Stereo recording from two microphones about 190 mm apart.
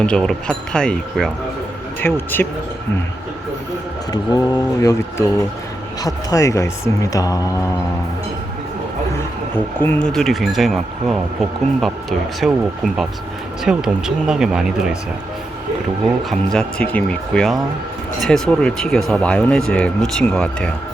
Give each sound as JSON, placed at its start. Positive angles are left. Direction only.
{"t": 0.0, "sound": "speech", "side_deg": 5}
{"t": 4.1, "sound": "speech", "side_deg": 20}
{"t": 9.8, "sound": "speech", "side_deg": 5}
{"t": 16.3, "sound": "speech", "side_deg": 5}